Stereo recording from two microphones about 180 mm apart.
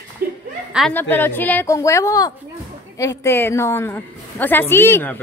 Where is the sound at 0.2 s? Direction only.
55° right (ahead or behind).